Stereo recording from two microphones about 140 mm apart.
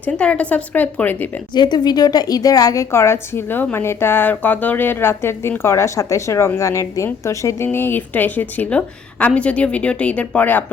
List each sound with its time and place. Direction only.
0.0 s a woman's voice: 10° left (ahead or behind)
1.5 s a woman's voice: 30° left (ahead or behind); by 10.6 s 10° left (ahead or behind)